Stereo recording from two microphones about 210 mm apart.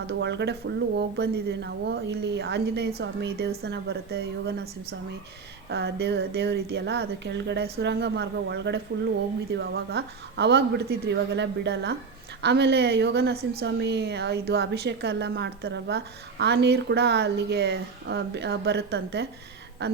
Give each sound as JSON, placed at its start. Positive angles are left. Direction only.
{"t": 0.1, "sound": "a woman's voice", "side_deg": -55}